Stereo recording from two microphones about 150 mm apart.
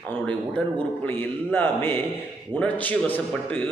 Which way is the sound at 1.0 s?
10° left (ahead or behind).